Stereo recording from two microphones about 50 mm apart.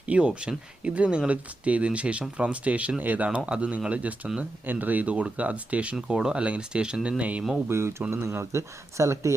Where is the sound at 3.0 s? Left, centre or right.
Right.